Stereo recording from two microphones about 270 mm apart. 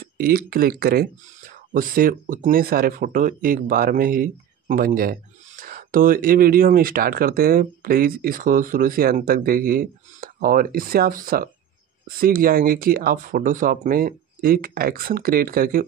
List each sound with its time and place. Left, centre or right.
0.0 s speech: right